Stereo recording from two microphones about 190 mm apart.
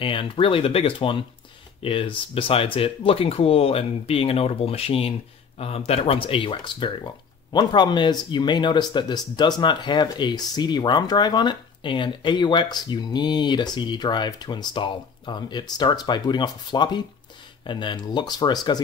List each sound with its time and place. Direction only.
0.0 s speech: 25° left (ahead or behind)